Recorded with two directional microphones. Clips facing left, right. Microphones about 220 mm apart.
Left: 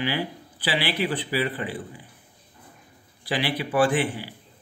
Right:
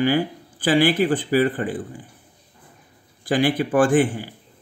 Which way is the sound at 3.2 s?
50° right (ahead or behind).